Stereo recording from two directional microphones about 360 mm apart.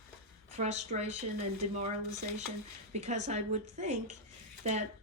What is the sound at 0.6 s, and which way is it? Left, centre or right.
Speech, centre.